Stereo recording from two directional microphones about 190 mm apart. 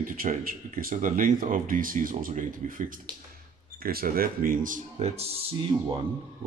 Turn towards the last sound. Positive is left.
turn(degrees=-25)  # may be behind; listen again after turning